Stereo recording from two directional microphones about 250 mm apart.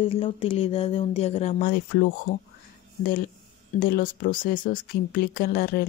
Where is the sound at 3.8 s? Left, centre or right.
Left.